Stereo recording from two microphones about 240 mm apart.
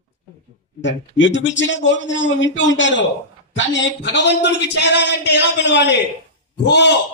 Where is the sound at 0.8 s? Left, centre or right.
Left.